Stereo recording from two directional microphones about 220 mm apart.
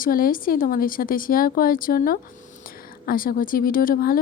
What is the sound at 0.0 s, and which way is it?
A woman's voice, 40° left (ahead or behind).